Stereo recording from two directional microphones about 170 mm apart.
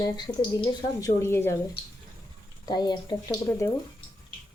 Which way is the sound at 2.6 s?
25° left (ahead or behind).